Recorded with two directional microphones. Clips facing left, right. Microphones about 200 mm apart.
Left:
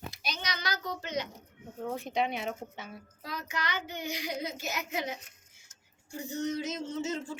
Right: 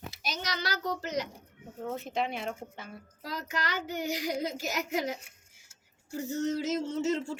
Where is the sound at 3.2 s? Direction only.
40° right (ahead or behind).